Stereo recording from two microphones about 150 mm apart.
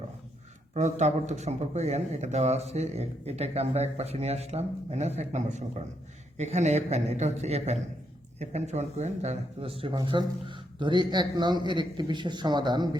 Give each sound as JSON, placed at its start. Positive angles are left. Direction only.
{"t": 0.7, "sound": "speech", "side_deg": -50}